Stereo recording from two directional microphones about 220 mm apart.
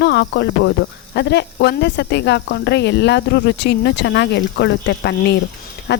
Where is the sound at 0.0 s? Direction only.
50° left (ahead or behind).